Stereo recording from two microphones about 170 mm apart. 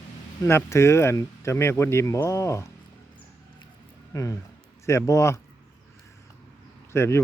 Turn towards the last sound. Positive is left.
turn(degrees=15)  # may be behind; listen again after turning